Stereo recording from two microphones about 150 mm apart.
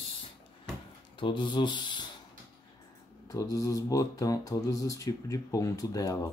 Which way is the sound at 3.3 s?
20° left (ahead or behind).